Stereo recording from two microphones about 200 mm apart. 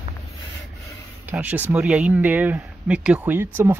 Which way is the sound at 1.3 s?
10° right (ahead or behind).